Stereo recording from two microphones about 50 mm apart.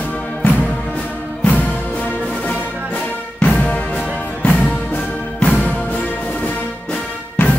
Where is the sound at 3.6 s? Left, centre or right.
Left.